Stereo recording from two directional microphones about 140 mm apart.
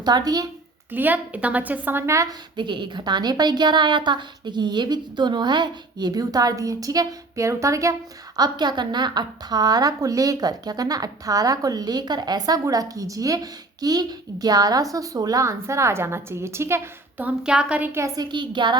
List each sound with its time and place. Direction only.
0.0 s a woman's voice: 30° right (ahead or behind)
0.9 s a woman's voice: 15° right (ahead or behind)
2.6 s a woman's voice: 35° right (ahead or behind)
18.3 s a woman's voice: 35° right (ahead or behind)